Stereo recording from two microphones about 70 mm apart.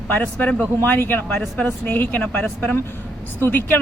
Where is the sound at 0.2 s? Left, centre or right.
Left.